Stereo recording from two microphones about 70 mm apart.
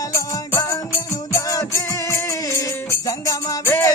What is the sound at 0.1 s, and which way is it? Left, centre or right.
Music, left.